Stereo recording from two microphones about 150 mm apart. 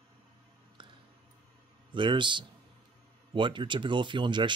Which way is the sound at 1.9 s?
35° right (ahead or behind).